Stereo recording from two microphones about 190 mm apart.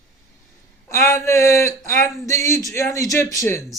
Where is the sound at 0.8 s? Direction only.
15° left (ahead or behind).